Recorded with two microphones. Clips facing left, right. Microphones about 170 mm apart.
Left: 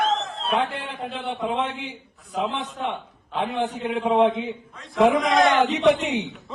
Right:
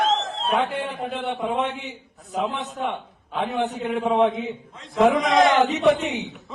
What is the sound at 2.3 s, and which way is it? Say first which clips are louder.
A man's voice: right 1 dB; centre (ahead or behind).